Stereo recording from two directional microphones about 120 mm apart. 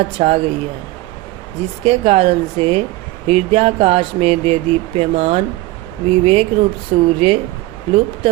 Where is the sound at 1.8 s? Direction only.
55° right (ahead or behind).